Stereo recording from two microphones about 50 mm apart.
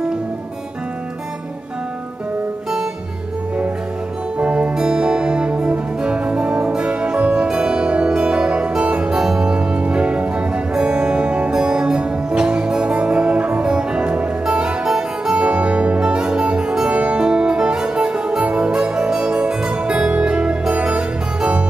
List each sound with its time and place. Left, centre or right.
4.4 s music: right